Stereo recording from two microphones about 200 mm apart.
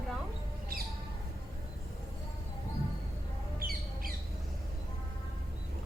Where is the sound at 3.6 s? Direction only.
45° right (ahead or behind).